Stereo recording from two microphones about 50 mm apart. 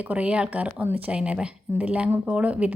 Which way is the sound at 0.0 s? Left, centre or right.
Right.